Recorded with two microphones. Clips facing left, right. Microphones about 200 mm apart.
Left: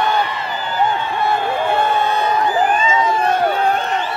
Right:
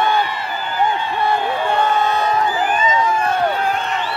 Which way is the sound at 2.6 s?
30° left (ahead or behind).